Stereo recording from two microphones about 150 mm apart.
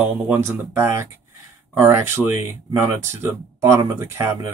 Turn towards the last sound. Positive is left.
turn(degrees=-20)  # may be behind; listen again after turning